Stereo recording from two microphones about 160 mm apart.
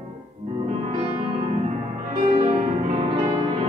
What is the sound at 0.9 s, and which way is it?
Music, 30° right (ahead or behind).